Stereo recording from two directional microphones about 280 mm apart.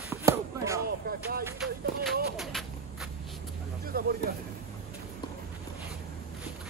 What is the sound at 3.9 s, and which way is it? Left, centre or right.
Speech, right.